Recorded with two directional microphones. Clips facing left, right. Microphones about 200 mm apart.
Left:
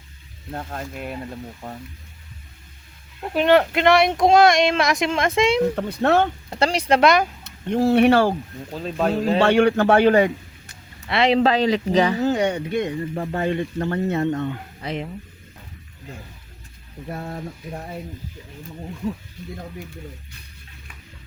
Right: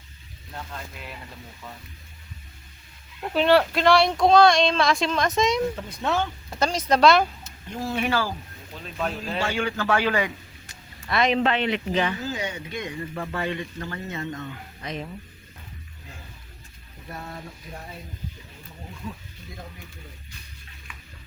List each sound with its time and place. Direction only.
0.5 s speech: 50° left (ahead or behind)
3.3 s speech: 15° left (ahead or behind)
5.7 s speech: 65° left (ahead or behind)
6.6 s speech: 30° left (ahead or behind)
7.4 s speech: 65° left (ahead or behind)
8.7 s speech: 35° left (ahead or behind)
9.4 s speech: 65° left (ahead or behind)
9.8 s speech: 45° left (ahead or behind)
11.0 s speech: 30° left (ahead or behind)
12.2 s speech: 65° left (ahead or behind)
13.1 s speech: 35° left (ahead or behind); by 14.6 s 60° left (ahead or behind)
14.8 s speech: 25° left (ahead or behind)
17.1 s speech: 50° left (ahead or behind)